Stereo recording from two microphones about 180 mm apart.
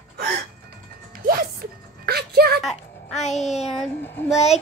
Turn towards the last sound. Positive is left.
turn(degrees=10)  # may be behind; listen again after turning